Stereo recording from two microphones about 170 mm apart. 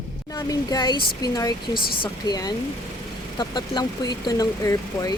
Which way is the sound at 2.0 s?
25° left (ahead or behind).